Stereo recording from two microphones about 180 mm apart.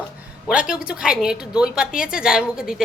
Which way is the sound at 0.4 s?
5° right (ahead or behind).